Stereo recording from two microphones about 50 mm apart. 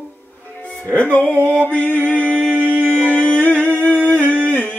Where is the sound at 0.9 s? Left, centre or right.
Left.